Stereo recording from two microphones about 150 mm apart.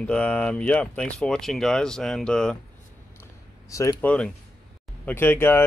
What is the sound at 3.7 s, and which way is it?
Speech, 20° left (ahead or behind).